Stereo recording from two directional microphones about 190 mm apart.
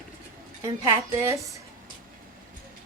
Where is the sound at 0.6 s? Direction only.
15° right (ahead or behind).